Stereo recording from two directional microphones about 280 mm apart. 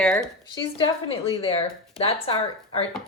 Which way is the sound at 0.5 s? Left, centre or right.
Centre.